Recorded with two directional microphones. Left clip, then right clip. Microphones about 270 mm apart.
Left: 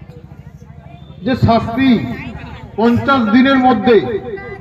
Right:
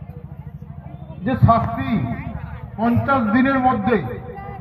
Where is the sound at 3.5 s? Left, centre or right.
Left.